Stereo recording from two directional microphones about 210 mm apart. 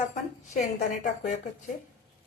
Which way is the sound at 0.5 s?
35° left (ahead or behind).